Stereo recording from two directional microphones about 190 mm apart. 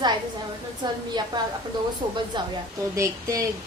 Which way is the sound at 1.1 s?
20° right (ahead or behind).